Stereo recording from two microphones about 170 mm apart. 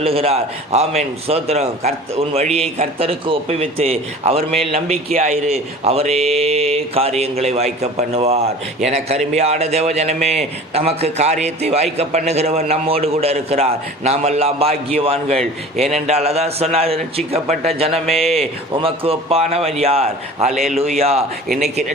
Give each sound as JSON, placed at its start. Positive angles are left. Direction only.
{"t": 0.0, "sound": "a man's voice", "side_deg": -35}